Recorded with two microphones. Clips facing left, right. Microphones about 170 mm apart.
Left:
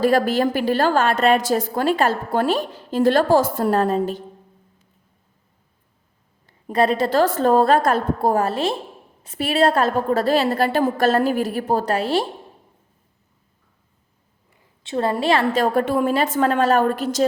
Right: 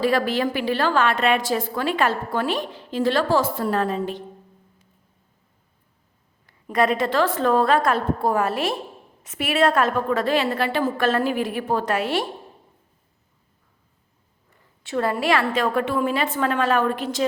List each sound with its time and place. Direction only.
0.0 s a woman's voice: 45° left (ahead or behind)
6.7 s a woman's voice: 30° left (ahead or behind)
14.8 s a woman's voice: 25° left (ahead or behind)
15.6 s a woman's voice: 40° left (ahead or behind)